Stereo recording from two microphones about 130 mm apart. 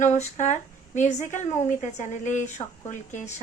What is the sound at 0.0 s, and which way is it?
A woman's voice, 65° left (ahead or behind).